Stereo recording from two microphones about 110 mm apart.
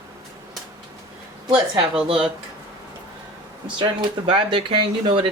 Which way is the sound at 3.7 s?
45° right (ahead or behind).